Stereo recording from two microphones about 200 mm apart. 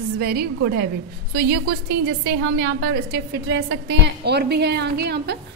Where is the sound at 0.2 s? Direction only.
50° right (ahead or behind).